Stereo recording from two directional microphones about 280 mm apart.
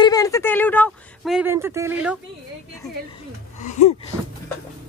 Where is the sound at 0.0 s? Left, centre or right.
Centre.